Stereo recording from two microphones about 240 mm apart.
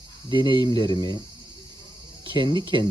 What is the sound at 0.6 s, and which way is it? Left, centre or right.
Speech, centre.